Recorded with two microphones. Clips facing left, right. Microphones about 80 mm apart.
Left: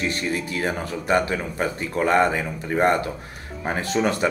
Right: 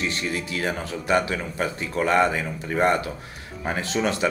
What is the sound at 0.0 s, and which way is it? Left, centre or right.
Speech, left.